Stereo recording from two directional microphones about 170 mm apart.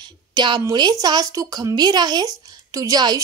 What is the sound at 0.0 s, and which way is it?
Speech, 25° right (ahead or behind).